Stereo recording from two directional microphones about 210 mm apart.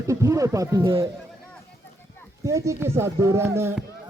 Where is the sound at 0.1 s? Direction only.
15° right (ahead or behind).